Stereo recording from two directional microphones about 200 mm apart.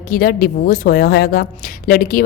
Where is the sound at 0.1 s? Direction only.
45° left (ahead or behind).